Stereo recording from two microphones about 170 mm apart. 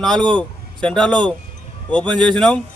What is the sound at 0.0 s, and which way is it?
A man's voice, 5° left (ahead or behind).